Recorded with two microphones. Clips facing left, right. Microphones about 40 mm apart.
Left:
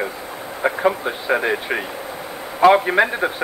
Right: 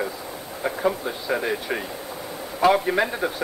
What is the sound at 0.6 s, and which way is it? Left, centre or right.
A man's voice, left.